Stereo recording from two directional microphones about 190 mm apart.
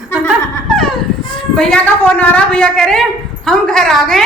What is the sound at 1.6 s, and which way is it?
A woman's voice, 5° left (ahead or behind).